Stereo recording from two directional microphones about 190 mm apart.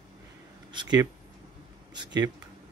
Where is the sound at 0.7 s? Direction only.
25° right (ahead or behind).